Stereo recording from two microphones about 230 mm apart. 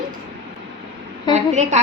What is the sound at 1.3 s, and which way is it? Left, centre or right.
Child singing, right.